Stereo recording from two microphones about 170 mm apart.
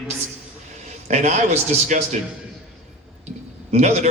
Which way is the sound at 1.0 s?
40° right (ahead or behind).